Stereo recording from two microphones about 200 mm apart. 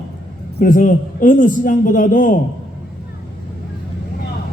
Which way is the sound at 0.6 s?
40° left (ahead or behind).